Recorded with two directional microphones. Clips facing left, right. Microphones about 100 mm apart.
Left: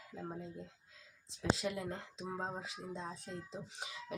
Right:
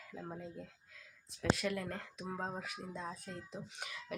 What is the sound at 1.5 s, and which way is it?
Speech, 20° left (ahead or behind).